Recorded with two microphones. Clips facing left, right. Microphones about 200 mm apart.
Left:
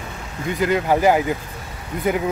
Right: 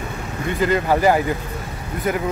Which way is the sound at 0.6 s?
10° left (ahead or behind).